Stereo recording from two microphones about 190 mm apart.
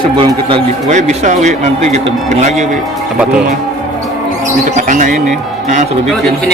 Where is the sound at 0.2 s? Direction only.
25° right (ahead or behind).